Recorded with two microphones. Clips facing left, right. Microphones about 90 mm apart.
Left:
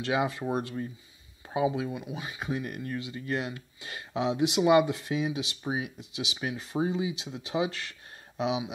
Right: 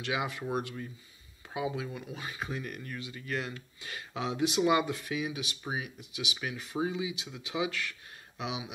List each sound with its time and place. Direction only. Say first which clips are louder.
0.0 s speech: left 5 dB; 30° left (ahead or behind)